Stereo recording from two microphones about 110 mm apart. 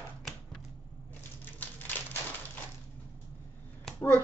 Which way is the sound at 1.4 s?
15° left (ahead or behind).